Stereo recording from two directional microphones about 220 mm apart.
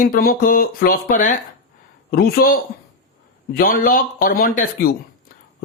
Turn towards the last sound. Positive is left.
turn(degrees=40)  # may be behind; listen again after turning